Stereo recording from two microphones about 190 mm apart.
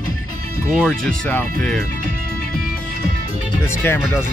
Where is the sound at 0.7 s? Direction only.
Centre (ahead or behind).